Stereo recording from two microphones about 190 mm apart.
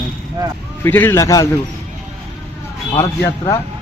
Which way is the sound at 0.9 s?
10° left (ahead or behind).